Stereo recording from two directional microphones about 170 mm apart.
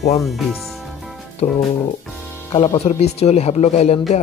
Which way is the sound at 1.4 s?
40° left (ahead or behind).